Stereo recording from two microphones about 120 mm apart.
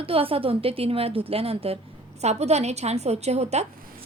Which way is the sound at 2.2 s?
65° right (ahead or behind).